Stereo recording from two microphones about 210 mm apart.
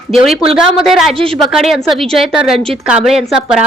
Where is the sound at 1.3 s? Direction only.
Centre (ahead or behind).